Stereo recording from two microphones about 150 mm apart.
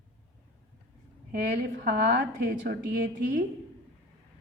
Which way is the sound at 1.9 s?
80° right.